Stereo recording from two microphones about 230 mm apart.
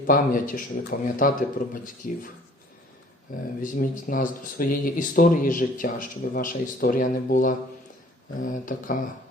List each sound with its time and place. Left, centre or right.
0.1 s speech: left
3.6 s speech: left